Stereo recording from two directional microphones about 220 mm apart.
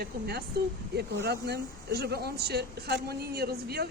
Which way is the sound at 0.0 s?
45° right (ahead or behind).